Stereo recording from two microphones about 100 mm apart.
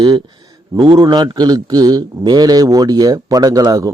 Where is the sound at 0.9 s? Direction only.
45° right (ahead or behind).